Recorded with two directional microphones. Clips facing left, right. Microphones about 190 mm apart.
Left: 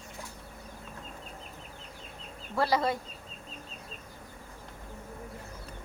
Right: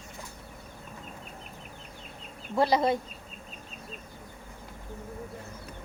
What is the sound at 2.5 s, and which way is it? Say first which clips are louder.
Speech: right 4 dB; 20° right (ahead or behind).